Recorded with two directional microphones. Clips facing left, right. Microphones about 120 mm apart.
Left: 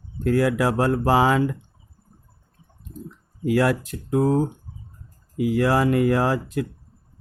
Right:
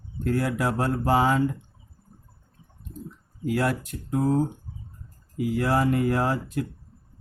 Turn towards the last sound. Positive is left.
turn(degrees=90)